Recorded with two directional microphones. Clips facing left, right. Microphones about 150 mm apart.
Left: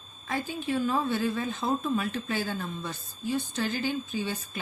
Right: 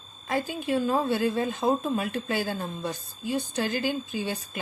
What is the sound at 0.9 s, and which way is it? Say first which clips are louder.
Speech: right 3 dB; 40° right (ahead or behind).